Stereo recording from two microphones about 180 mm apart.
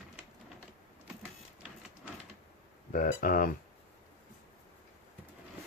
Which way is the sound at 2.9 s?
50° left (ahead or behind).